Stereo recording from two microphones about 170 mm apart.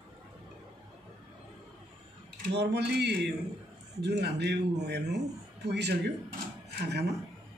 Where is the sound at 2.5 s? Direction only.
80° right.